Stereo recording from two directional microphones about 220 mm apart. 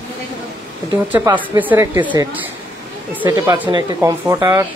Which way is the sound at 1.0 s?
10° right (ahead or behind).